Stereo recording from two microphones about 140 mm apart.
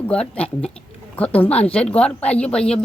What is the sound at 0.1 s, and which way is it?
Speech, 10° left (ahead or behind).